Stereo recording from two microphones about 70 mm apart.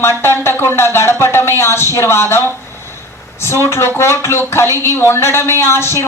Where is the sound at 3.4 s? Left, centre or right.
Left.